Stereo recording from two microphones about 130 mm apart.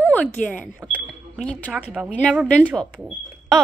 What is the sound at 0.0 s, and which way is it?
Speech, 10° left (ahead or behind).